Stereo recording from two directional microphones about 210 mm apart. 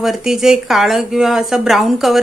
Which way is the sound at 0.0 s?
Centre (ahead or behind).